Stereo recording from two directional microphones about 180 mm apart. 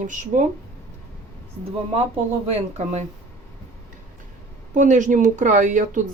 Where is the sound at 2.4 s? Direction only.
35° right (ahead or behind).